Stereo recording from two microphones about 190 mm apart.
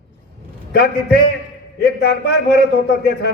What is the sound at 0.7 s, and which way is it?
Speech, 55° left (ahead or behind).